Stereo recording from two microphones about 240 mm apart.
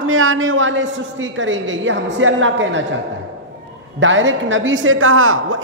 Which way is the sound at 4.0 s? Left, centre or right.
Right.